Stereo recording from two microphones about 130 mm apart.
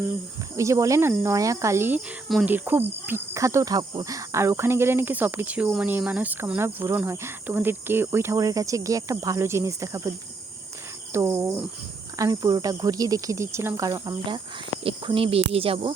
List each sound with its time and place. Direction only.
0.5 s speech: 25° right (ahead or behind)
11.1 s speech: 20° right (ahead or behind)
12.1 s speech: 30° right (ahead or behind); by 16.0 s 45° right (ahead or behind)